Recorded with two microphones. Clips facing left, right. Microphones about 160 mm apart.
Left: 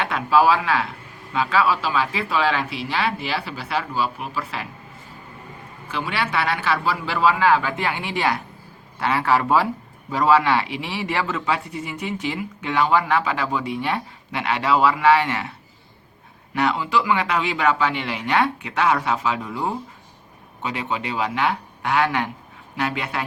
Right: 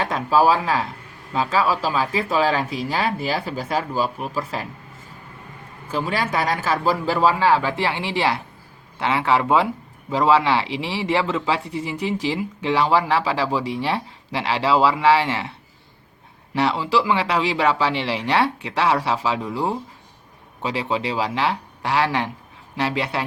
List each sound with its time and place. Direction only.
0.0 s speech: 35° right (ahead or behind)
5.9 s speech: 40° right (ahead or behind)
16.6 s speech: 30° right (ahead or behind)
20.6 s speech: 30° right (ahead or behind)